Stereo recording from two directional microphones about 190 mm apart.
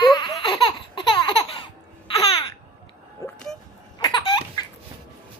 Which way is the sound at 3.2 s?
15° left (ahead or behind).